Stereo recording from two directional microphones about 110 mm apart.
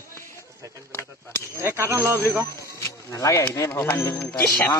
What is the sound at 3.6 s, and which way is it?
Speech, 25° left (ahead or behind).